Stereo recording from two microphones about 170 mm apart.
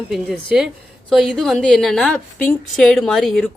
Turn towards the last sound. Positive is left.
turn(degrees=0)  # may be behind; listen again after turning